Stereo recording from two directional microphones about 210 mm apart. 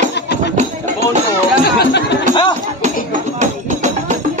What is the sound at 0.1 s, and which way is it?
Music, 55° left (ahead or behind).